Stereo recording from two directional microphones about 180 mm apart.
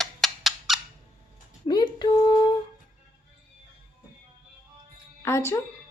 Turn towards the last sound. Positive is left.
turn(degrees=15)  # may be behind; listen again after turning